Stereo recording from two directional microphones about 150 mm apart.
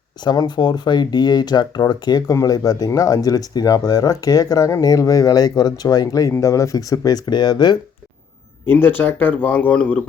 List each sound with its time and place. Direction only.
0.3 s speech: 30° left (ahead or behind)
8.6 s speech: 15° left (ahead or behind)